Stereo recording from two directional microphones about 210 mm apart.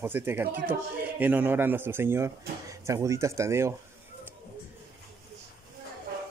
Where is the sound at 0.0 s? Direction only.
10° right (ahead or behind).